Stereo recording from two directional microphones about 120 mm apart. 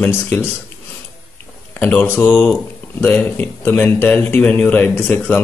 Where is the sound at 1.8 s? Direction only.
10° left (ahead or behind).